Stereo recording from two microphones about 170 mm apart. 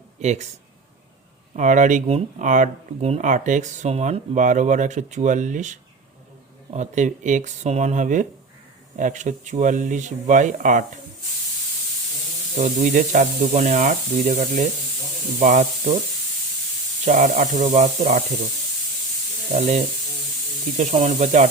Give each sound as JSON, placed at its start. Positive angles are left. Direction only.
{"t": 0.2, "sound": "speech", "side_deg": -40}
{"t": 1.5, "sound": "speech", "side_deg": -50}
{"t": 12.5, "sound": "speech", "side_deg": -45}
{"t": 17.1, "sound": "speech", "side_deg": -45}
{"t": 19.5, "sound": "speech", "side_deg": -40}